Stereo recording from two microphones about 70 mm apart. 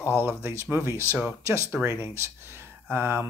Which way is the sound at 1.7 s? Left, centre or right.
Right.